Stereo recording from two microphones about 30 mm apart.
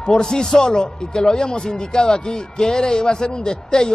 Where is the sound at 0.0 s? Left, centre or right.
Left.